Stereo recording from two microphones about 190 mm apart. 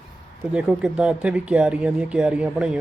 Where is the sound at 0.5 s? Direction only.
5° right (ahead or behind).